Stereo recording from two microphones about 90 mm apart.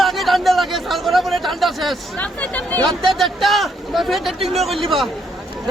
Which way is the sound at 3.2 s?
Centre (ahead or behind).